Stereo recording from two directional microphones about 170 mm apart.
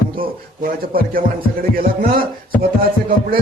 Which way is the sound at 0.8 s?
60° right (ahead or behind).